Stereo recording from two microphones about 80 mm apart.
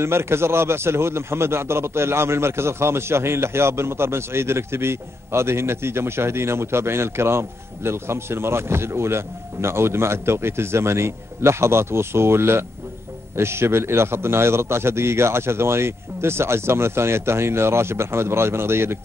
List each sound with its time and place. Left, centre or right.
0.0 s a man's voice: right